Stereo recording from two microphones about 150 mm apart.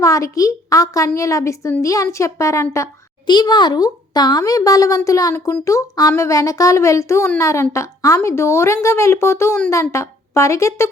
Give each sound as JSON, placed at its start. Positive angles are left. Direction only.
{"t": 0.0, "sound": "a woman's voice", "side_deg": 20}